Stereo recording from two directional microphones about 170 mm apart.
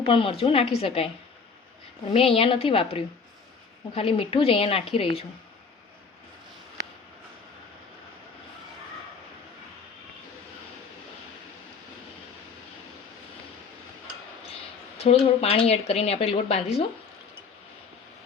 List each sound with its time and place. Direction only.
0.1 s a woman's voice: 30° left (ahead or behind)
14.4 s speech: 35° left (ahead or behind)